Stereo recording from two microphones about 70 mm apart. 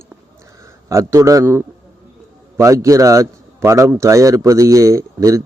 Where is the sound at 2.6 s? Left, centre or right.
Right.